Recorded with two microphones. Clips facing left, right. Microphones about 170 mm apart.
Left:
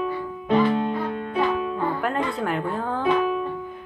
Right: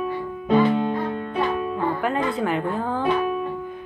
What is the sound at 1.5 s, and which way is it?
Music, centre (ahead or behind).